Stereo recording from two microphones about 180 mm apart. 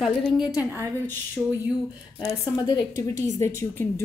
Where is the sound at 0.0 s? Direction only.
Centre (ahead or behind).